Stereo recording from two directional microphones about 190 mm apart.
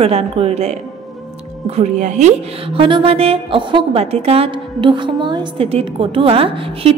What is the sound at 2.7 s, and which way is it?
A woman's voice, 25° right (ahead or behind).